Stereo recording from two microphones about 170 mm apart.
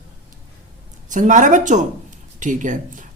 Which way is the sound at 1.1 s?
50° right (ahead or behind).